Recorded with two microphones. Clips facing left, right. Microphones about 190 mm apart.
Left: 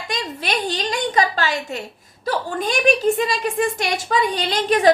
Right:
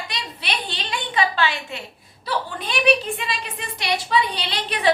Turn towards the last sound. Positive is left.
turn(degrees=45)  # may be behind; listen again after turning